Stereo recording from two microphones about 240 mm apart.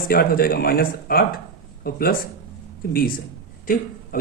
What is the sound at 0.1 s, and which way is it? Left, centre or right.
Speech, left.